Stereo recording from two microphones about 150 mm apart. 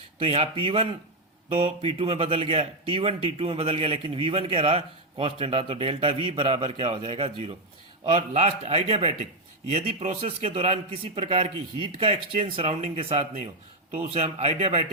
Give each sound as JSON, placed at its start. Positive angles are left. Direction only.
{"t": 0.2, "sound": "a man's voice", "side_deg": -40}